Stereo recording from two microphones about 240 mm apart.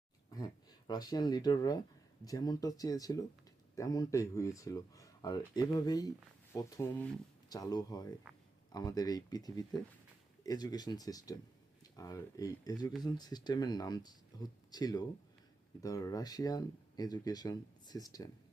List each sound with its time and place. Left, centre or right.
0.3 s speech: centre